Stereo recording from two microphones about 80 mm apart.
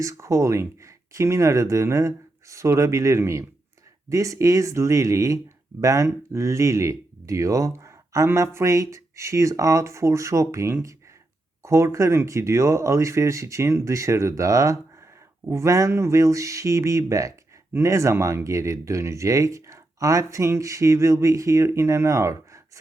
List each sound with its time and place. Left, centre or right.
0.0 s speech: right